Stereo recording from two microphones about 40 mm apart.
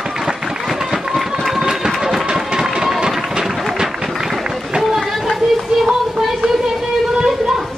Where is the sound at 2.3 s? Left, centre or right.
Right.